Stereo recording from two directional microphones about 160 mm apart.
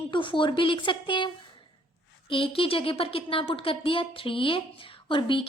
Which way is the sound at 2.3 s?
35° left (ahead or behind).